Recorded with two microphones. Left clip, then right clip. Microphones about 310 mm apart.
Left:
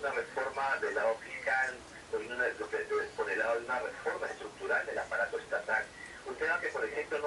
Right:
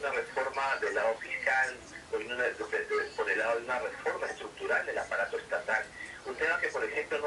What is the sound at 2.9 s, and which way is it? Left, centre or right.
Speech, centre.